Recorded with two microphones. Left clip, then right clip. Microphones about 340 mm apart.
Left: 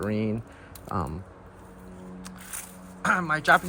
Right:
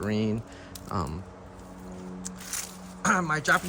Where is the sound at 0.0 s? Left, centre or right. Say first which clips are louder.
Even; centre.